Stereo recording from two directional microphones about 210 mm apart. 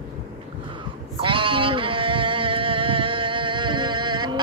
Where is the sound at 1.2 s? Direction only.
25° right (ahead or behind).